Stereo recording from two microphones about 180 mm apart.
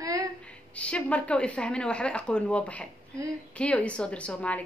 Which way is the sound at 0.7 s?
5° left (ahead or behind).